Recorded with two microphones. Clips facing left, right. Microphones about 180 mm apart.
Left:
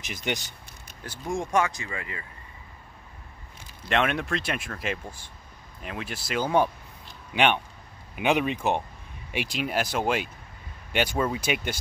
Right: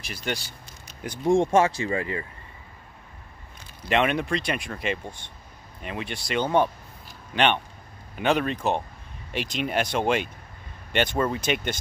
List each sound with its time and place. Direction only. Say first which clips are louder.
0.0 s speech: even; 20° left (ahead or behind)
1.0 s speech: right 10 dB; 20° right (ahead or behind)
3.9 s speech: right 2 dB; centre (ahead or behind)